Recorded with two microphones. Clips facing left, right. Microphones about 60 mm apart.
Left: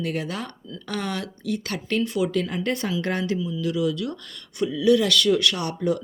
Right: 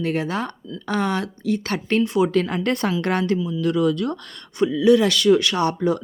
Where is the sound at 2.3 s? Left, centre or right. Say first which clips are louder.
Right 4 dB; right.